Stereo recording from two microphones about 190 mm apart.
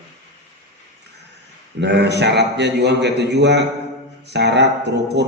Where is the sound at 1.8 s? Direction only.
65° right (ahead or behind).